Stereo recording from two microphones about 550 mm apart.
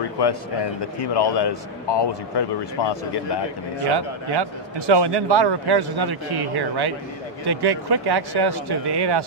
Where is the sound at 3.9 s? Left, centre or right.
Right.